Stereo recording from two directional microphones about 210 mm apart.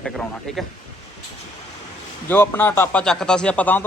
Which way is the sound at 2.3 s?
10° left (ahead or behind).